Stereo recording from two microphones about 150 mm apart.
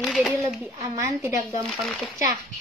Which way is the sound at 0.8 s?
20° right (ahead or behind).